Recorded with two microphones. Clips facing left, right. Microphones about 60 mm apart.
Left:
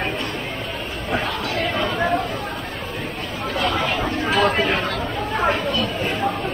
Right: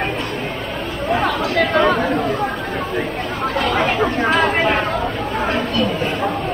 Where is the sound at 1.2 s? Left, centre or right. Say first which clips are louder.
Right 6 dB; right.